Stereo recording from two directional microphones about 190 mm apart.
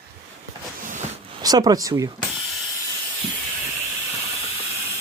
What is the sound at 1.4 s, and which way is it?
Speech, 20° right (ahead or behind).